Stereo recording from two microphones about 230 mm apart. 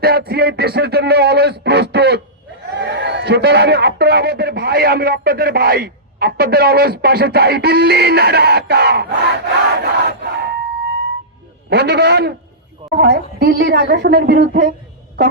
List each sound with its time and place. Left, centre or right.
0.0 s a man's voice: right
9.6 s crowd: right
11.7 s a man's voice: right